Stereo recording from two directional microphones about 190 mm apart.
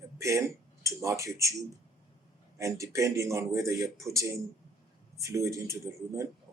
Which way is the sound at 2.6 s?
15° right (ahead or behind).